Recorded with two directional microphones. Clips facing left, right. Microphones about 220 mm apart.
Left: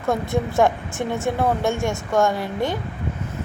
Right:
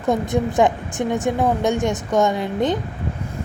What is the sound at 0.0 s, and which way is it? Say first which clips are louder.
A woman's voice: right 3 dB; 15° right (ahead or behind).